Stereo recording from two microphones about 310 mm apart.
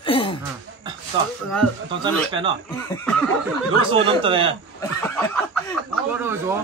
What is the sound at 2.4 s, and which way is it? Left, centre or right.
Speech, centre.